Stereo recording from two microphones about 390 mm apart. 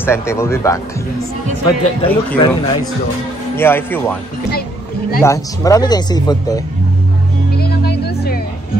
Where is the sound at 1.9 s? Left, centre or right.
Centre.